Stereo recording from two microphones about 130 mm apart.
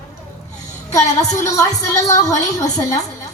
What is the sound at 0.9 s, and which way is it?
A woman's voice, 25° left (ahead or behind).